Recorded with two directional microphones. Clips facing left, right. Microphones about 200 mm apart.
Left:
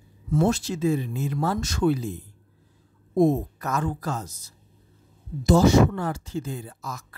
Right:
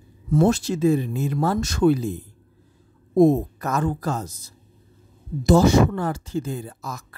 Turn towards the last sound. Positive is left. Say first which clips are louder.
# right 3 dB
turn(degrees=-45)  # may be behind; listen again after turning